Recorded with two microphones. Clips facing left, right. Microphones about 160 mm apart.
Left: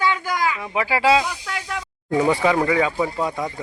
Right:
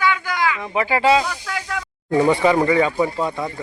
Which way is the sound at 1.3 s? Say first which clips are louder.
Right 2 dB; 15° left (ahead or behind).